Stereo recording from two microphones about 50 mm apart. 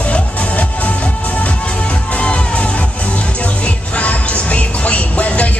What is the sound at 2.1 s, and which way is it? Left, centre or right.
Music, left.